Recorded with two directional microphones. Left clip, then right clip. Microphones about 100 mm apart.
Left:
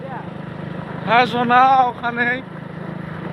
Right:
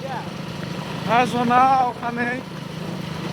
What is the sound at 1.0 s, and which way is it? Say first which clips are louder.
Speech: left 3 dB; 25° left (ahead or behind).